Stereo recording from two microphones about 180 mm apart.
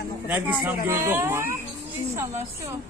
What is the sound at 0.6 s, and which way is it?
Speech, 15° right (ahead or behind).